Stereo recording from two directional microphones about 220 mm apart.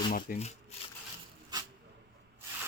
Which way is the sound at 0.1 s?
35° left (ahead or behind).